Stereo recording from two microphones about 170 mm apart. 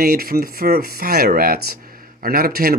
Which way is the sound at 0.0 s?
60° right (ahead or behind).